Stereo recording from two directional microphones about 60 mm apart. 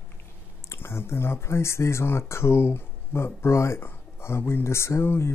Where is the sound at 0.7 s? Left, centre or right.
Left.